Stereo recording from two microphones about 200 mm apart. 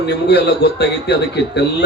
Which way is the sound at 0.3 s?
55° left (ahead or behind).